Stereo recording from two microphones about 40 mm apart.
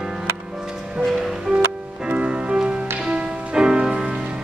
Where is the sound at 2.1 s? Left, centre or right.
Right.